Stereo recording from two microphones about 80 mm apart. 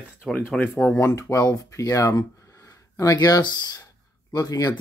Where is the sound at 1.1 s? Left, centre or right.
Left.